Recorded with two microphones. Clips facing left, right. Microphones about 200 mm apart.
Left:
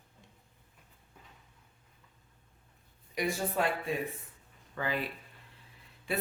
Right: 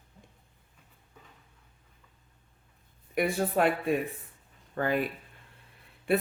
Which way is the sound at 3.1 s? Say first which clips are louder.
Right 5 dB; 60° right (ahead or behind).